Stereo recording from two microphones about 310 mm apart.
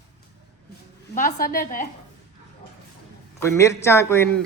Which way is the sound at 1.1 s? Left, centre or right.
Left.